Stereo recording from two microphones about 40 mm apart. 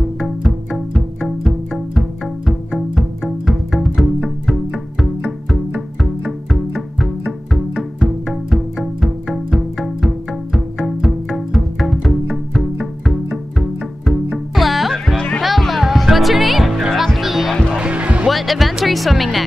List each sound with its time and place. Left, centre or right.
0.2 s music: centre
17.7 s music: right
18.3 s music: centre